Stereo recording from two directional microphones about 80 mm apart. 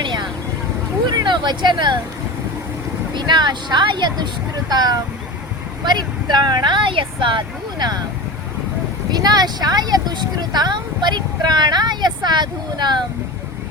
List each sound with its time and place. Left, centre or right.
0.0 s vehicle: right
1.0 s speech: right
3.2 s speech: right
9.1 s speech: right